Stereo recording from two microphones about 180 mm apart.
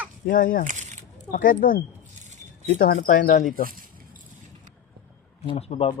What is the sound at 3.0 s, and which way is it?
Speech, 50° left (ahead or behind).